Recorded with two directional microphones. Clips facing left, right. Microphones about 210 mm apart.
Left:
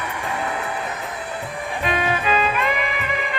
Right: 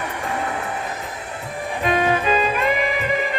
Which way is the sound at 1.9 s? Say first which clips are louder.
Right 3 dB; 40° right (ahead or behind).